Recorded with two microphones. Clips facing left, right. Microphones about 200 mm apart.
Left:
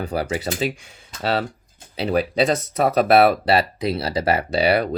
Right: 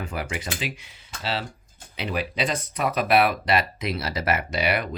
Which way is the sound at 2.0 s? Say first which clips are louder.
Left 8 dB; 35° left (ahead or behind).